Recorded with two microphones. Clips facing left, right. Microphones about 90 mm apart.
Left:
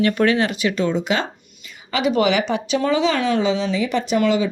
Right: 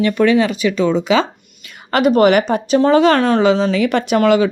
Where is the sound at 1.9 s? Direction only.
50° right (ahead or behind).